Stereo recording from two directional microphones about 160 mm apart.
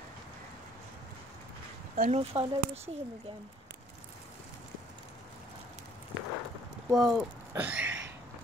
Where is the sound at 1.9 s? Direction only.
60° right (ahead or behind).